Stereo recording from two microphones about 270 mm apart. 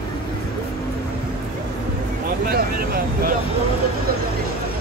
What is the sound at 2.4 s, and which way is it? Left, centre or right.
Vehicle, right.